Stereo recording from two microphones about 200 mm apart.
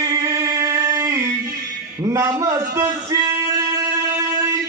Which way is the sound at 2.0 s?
15° right (ahead or behind).